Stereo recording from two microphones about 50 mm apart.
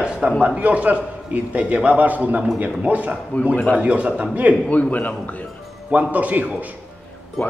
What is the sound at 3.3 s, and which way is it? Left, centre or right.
Speech, left.